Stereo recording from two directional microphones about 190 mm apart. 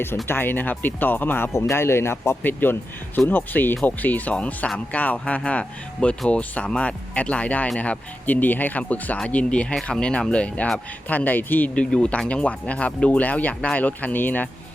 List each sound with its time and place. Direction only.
0.3 s speech: 10° left (ahead or behind)